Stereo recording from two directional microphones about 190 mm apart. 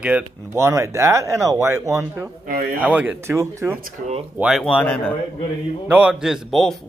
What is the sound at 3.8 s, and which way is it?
Speech, 40° right (ahead or behind).